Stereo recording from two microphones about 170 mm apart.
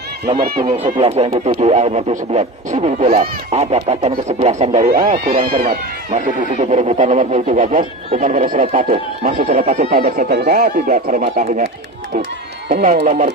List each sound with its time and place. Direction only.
0.9 s speech: 30° right (ahead or behind)
4.9 s speech: 55° right (ahead or behind)
6.1 s speech: 45° right (ahead or behind)
8.1 s speech: 45° right (ahead or behind)
12.8 s speech: 50° right (ahead or behind)